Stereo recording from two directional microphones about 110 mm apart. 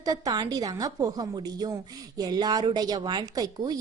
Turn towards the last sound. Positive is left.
turn(degrees=-35)  # may be behind; listen again after turning